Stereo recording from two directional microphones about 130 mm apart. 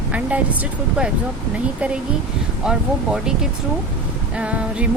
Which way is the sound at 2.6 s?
5° right (ahead or behind).